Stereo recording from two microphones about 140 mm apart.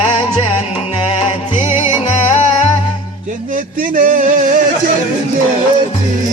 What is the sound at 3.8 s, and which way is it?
Music, 80° right.